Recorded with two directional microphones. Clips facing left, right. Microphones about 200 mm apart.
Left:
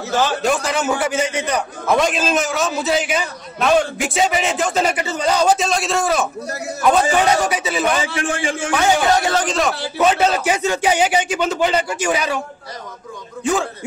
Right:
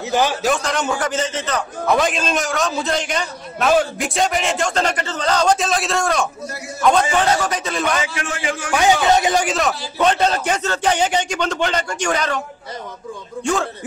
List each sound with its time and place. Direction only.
0.4 s a man's voice: 5° left (ahead or behind)
1.9 s a man's voice: centre (ahead or behind)
8.0 s a man's voice: 30° left (ahead or behind)
8.7 s a man's voice: 20° right (ahead or behind); by 12.4 s 10° left (ahead or behind)
13.4 s a man's voice: 5° left (ahead or behind)